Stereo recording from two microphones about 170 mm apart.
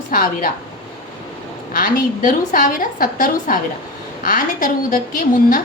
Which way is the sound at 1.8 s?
50° left (ahead or behind).